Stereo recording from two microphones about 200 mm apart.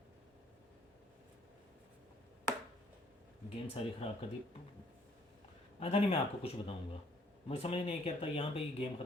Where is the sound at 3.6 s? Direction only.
30° left (ahead or behind).